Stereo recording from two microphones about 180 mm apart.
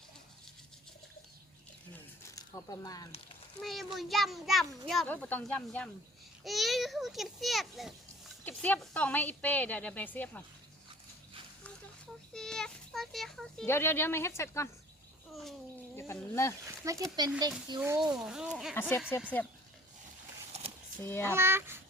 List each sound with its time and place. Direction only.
2.3 s speech: 20° left (ahead or behind)
3.6 s a child's voice: centre (ahead or behind)
12.3 s a child's voice: 5° left (ahead or behind)
13.7 s a woman's voice: 15° left (ahead or behind)
16.0 s speech: 15° left (ahead or behind)
16.6 s speech: 15° right (ahead or behind)
17.7 s a child's voice: 5° right (ahead or behind)
18.7 s a woman's voice: 15° left (ahead or behind)
20.5 s a sound: 35° right (ahead or behind)
21.0 s a woman's voice: 15° left (ahead or behind)
21.2 s speech: 15° right (ahead or behind)